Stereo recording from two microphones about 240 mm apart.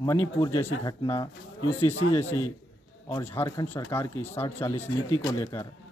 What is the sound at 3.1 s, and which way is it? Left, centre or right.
Speech, centre.